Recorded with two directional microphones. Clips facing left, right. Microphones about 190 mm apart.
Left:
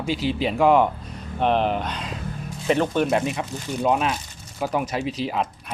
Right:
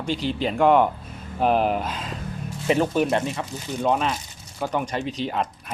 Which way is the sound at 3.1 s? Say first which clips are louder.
Left 2 dB; 15° left (ahead or behind).